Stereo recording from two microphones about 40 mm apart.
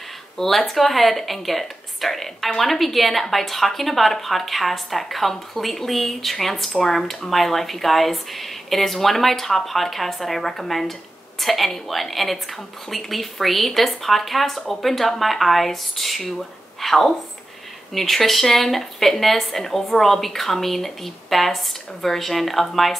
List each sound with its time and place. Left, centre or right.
0.4 s a woman's voice: centre